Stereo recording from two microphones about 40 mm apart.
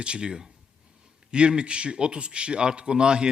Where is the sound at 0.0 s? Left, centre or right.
Right.